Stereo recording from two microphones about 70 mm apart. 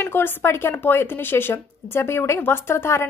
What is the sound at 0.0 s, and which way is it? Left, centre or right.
Speech, left.